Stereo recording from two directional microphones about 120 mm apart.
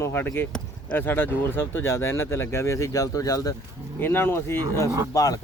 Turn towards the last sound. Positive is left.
turn(degrees=30)  # may be behind; listen again after turning